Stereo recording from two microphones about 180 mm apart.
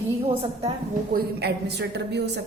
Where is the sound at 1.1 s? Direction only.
65° right (ahead or behind).